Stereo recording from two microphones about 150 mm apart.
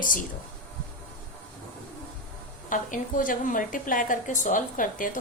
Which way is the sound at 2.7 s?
60° left (ahead or behind).